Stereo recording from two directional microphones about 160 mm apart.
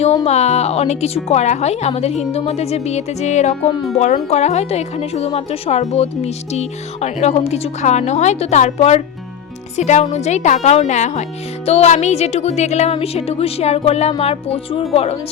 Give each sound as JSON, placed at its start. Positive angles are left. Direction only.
{"t": 0.3, "sound": "speech", "side_deg": 45}